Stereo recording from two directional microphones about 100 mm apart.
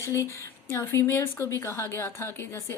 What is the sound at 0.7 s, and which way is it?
A woman's voice, 25° left (ahead or behind).